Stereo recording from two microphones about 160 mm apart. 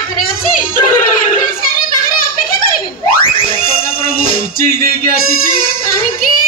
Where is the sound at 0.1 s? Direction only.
60° left (ahead or behind).